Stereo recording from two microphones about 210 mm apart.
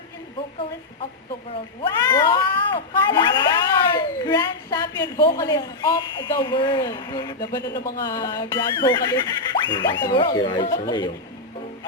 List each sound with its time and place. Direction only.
1.8 s speech: 20° left (ahead or behind)
7.7 s speech: 45° left (ahead or behind)
8.0 s speech: 15° left (ahead or behind)
9.5 s a sound: 25° left (ahead or behind)
10.0 s speech: 20° left (ahead or behind)